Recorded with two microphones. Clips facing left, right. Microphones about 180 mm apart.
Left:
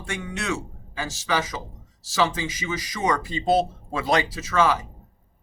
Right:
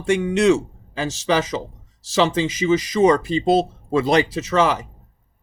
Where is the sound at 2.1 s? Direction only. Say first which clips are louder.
Right 6 dB; 20° right (ahead or behind).